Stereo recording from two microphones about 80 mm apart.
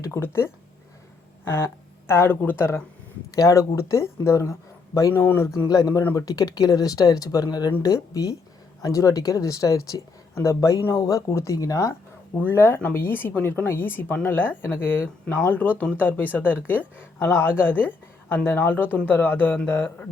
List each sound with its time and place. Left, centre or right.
0.0 s speech: left
3.3 s speech: left
5.1 s speech: left
5.6 s speech: left
12.4 s speech: left